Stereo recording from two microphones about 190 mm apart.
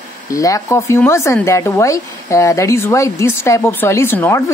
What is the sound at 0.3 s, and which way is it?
Speech, 15° left (ahead or behind).